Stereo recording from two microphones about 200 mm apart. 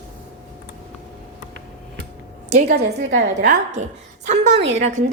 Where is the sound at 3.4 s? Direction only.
35° right (ahead or behind).